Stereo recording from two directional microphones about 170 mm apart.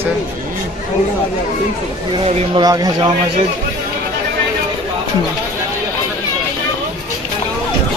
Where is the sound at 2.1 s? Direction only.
30° right (ahead or behind).